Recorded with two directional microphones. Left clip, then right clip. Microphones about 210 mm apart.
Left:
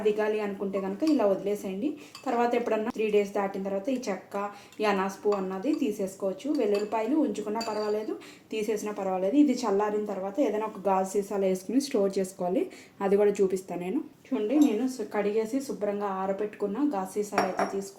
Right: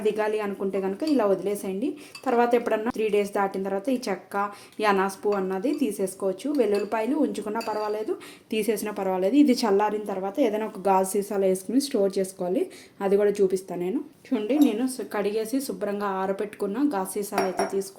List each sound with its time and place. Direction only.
0.0 s speech: 55° right (ahead or behind)
11.3 s speech: 30° right (ahead or behind)
14.3 s speech: 55° right (ahead or behind)